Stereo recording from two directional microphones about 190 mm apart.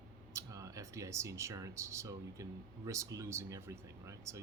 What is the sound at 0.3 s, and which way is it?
A man's voice, 15° right (ahead or behind).